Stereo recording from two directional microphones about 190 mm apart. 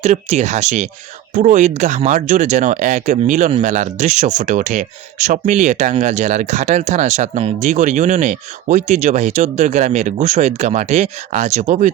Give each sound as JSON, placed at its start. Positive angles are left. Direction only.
{"t": 0.0, "sound": "speech", "side_deg": -35}